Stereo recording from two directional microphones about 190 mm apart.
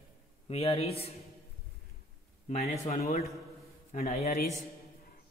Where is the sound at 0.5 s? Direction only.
30° left (ahead or behind).